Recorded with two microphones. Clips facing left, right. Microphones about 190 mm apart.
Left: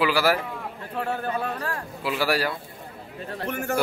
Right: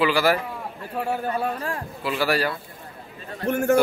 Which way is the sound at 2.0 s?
10° left (ahead or behind).